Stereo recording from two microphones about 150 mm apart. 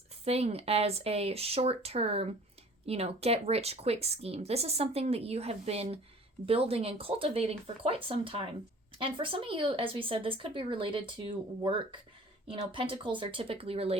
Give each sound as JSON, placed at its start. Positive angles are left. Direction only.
{"t": 0.3, "sound": "speech", "side_deg": -45}